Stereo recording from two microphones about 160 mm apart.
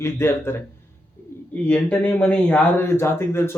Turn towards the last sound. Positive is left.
turn(degrees=15)  # may be behind; listen again after turning